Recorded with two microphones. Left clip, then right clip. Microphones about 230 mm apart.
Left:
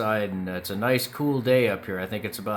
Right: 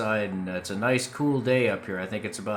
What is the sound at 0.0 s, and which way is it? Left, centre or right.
Speech, centre.